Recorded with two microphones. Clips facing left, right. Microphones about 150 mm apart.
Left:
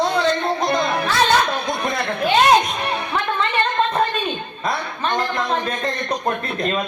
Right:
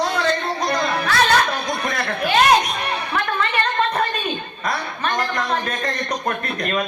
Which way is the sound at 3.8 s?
25° left (ahead or behind).